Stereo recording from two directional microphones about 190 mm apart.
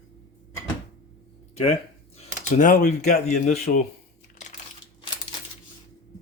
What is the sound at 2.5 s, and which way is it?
Speech, 45° left (ahead or behind).